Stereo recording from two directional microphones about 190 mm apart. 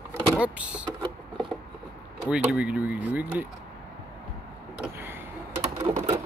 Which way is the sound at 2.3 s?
5° right (ahead or behind).